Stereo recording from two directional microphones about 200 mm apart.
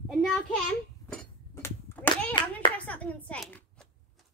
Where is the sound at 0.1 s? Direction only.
Centre (ahead or behind).